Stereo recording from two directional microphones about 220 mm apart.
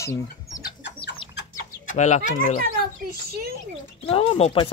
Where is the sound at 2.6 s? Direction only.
45° right (ahead or behind).